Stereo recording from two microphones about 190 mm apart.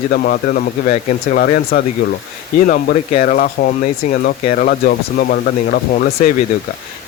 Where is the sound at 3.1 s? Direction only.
45° left (ahead or behind).